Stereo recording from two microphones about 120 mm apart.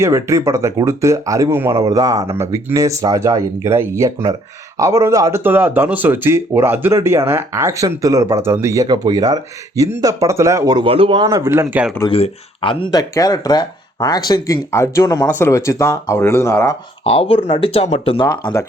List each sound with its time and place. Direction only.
0.0 s speech: 25° right (ahead or behind)
2.3 s speech: 20° right (ahead or behind)
10.8 s speech: 50° right (ahead or behind)
11.3 s speech: 25° right (ahead or behind)
12.1 s speech: 50° left (ahead or behind)
12.9 s speech: 30° left (ahead or behind)
17.0 s speech: 55° left (ahead or behind)